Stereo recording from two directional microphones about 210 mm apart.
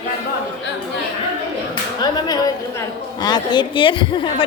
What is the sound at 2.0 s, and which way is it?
A woman's voice, 20° left (ahead or behind).